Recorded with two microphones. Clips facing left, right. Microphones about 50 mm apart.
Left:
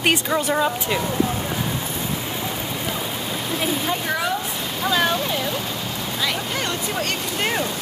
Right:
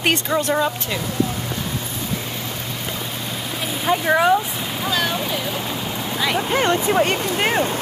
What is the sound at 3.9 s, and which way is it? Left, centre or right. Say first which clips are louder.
Speech: right 7 dB; right.